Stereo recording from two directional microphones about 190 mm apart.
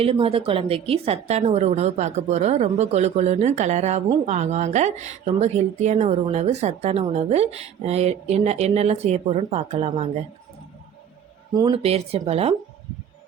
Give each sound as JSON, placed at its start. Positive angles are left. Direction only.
{"t": 0.0, "sound": "a woman's voice", "side_deg": -30}
{"t": 11.5, "sound": "speech", "side_deg": -20}
{"t": 11.8, "sound": "a woman's voice", "side_deg": -35}